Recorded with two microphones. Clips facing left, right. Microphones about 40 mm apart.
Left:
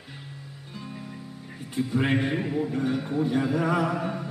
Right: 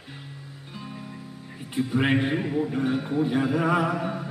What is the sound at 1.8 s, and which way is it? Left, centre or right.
Music, centre.